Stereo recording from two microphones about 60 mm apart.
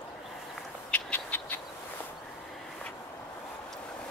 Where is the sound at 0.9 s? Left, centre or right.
Left.